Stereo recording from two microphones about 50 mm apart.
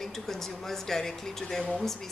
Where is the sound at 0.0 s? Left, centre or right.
Centre.